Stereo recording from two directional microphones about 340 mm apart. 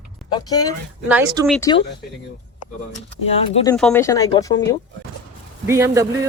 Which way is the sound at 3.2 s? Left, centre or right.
Centre.